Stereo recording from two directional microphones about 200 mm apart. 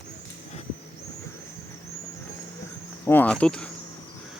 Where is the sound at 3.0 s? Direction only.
10° left (ahead or behind).